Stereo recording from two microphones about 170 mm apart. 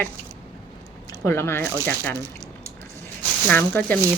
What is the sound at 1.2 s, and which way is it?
Speech, 15° left (ahead or behind).